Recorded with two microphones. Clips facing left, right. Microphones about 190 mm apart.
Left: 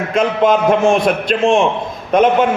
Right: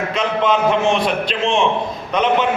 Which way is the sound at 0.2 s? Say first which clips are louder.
Left 5 dB; 50° left (ahead or behind).